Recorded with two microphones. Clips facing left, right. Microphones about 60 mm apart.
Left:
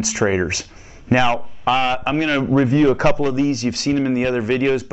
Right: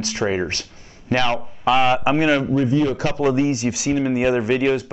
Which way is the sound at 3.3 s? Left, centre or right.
Centre.